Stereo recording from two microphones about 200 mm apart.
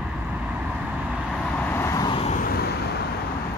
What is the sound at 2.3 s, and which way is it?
Vehicle, 50° left (ahead or behind).